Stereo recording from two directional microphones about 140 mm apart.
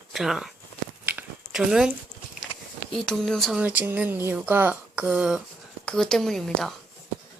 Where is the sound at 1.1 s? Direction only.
10° right (ahead or behind).